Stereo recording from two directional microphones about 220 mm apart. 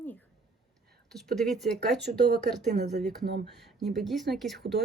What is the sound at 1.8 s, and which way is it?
Speech, 50° right (ahead or behind).